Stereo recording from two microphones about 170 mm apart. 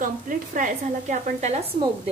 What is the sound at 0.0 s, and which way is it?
A woman's voice, 50° right (ahead or behind).